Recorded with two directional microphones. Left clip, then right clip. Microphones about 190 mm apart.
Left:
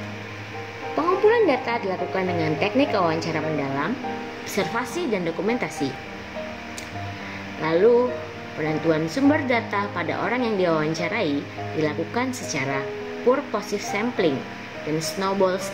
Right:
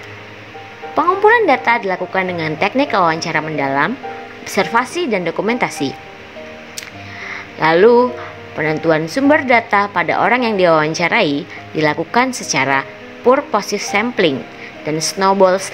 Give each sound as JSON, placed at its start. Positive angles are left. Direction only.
{"t": 1.3, "sound": "a woman's voice", "side_deg": -35}
{"t": 7.6, "sound": "a woman's voice", "side_deg": -35}